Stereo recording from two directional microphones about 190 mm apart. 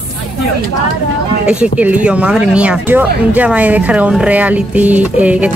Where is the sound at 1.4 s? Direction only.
5° right (ahead or behind).